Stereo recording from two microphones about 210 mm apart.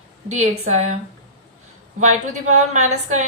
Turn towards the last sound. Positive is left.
turn(degrees=-35)  # may be behind; listen again after turning